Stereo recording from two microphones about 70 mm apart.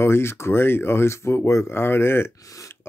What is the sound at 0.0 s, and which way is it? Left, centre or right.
Speech, left.